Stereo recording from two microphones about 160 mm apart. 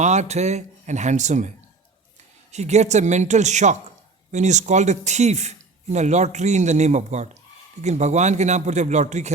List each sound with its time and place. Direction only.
0.0 s a man's voice: 45° right (ahead or behind)
2.5 s a man's voice: 45° right (ahead or behind)